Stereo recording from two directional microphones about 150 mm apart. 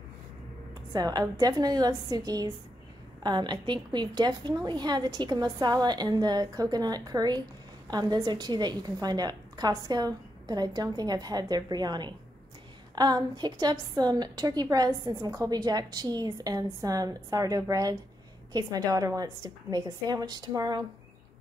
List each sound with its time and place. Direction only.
0.9 s a woman's voice: 25° right (ahead or behind)